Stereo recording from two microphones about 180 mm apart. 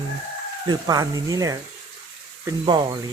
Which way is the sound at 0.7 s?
20° right (ahead or behind).